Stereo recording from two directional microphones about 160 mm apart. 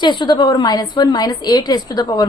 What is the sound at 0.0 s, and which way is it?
A woman's voice, 30° left (ahead or behind).